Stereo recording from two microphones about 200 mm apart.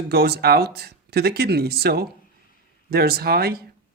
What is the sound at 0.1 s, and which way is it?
A woman's voice, 55° right (ahead or behind).